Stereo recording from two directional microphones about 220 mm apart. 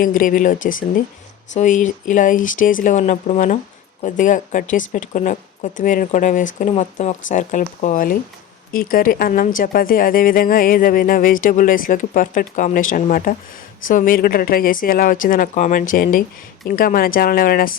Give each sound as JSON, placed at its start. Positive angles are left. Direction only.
{"t": 0.0, "sound": "speech", "side_deg": 40}